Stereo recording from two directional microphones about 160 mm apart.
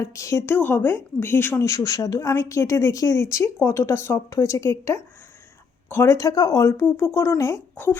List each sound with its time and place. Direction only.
0.0 s a woman's voice: 20° left (ahead or behind)